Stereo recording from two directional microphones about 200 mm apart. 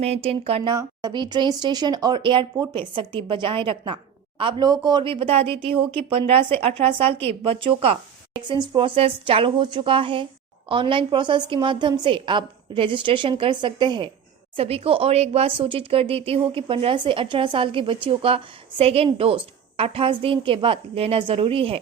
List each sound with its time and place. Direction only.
0.0 s a woman's voice: 30° right (ahead or behind)